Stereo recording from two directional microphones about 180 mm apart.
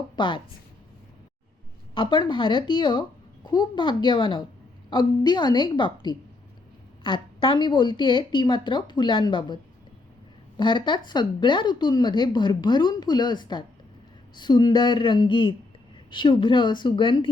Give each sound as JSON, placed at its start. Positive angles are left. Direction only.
{"t": 0.2, "sound": "a woman's voice", "side_deg": 25}
{"t": 2.0, "sound": "a woman's voice", "side_deg": 25}
{"t": 10.6, "sound": "a woman's voice", "side_deg": 25}